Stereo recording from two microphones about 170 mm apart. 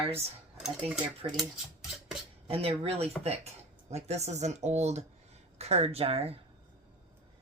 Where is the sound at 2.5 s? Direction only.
35° right (ahead or behind).